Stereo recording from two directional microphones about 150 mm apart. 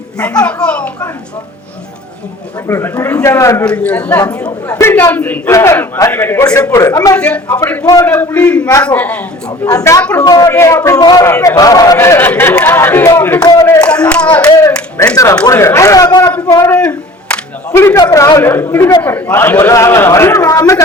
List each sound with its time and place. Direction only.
0.4 s a sound: 5° left (ahead or behind)
2.6 s a man's voice: 15° left (ahead or behind)
3.7 s a man's voice: 10° left (ahead or behind)
7.2 s a man's voice: 10° left (ahead or behind)
9.6 s a man's voice: 25° left (ahead or behind)
13.4 s a sound: 20° left (ahead or behind)
14.3 s a man's voice: 10° left (ahead or behind)
14.9 s a man's voice: 20° left (ahead or behind)
16.5 s music: 20° left (ahead or behind)
18.0 s a man's voice: 25° left (ahead or behind)